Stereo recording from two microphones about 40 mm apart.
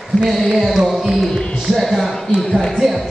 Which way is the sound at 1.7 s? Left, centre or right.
Centre.